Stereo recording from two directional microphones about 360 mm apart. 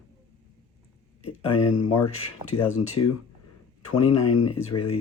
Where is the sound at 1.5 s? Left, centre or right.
Left.